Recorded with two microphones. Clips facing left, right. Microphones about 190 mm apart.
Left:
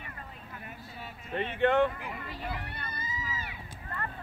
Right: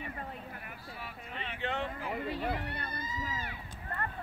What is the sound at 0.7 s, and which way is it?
Vehicle, 25° left (ahead or behind).